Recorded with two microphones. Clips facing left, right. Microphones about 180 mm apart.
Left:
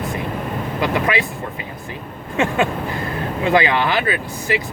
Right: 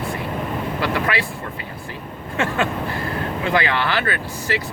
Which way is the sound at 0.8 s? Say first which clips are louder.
Left 4 dB; 15° left (ahead or behind).